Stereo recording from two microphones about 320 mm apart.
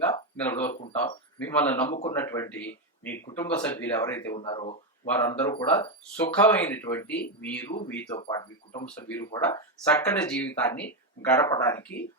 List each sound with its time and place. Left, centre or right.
0.0 s speech: centre